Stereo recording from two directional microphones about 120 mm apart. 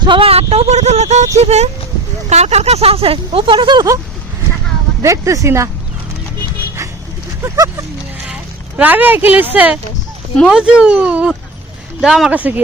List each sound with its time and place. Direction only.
0.0 s speech: 45° right (ahead or behind)
5.0 s speech: 25° right (ahead or behind)
7.4 s speech: 25° right (ahead or behind)
8.8 s speech: 15° right (ahead or behind)